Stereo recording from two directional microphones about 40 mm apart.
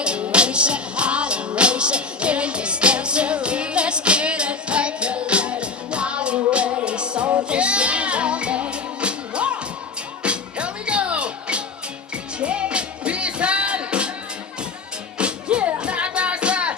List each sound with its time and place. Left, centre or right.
0.0 s music: right
15.2 s music: right